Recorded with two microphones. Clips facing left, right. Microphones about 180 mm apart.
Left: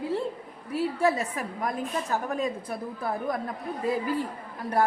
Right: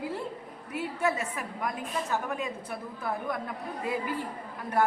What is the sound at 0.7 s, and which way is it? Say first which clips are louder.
A woman's voice: left 5 dB; 35° left (ahead or behind).